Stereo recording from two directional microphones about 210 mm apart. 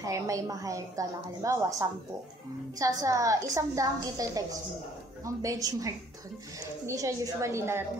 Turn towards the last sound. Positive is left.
turn(degrees=-15)  # may be behind; listen again after turning